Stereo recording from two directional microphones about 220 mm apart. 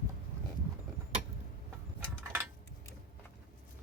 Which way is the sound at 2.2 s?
10° right (ahead or behind).